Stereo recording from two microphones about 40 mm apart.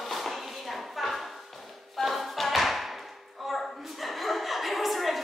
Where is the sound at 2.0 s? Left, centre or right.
Centre.